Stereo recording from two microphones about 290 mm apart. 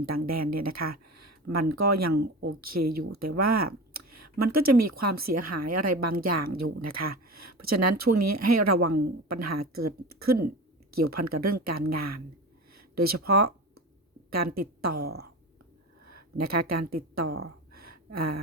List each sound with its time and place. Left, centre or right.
0.0 s speech: right
2.1 s speech: right
2.6 s a woman's voice: right
17.7 s a sound: right